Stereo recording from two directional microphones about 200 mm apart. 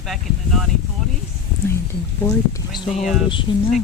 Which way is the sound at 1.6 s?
15° left (ahead or behind).